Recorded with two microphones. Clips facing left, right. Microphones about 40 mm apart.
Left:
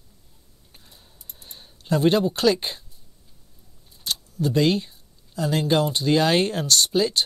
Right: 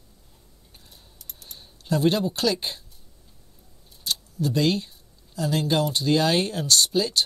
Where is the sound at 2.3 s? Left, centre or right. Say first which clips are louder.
Left 4 dB; left.